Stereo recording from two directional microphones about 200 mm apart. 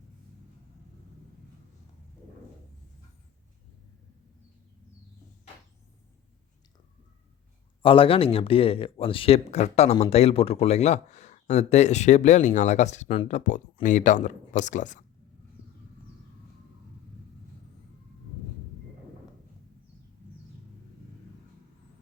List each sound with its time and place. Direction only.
7.8 s speech: 25° left (ahead or behind)